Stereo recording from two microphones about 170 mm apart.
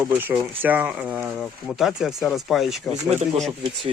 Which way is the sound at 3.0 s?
35° right (ahead or behind).